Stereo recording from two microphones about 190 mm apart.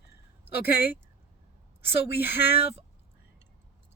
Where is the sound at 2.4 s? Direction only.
60° left (ahead or behind).